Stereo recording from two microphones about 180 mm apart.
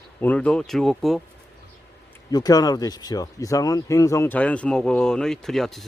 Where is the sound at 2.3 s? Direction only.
20° left (ahead or behind); by 5.9 s centre (ahead or behind).